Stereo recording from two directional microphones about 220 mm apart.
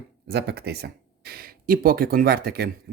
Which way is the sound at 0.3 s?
45° right (ahead or behind).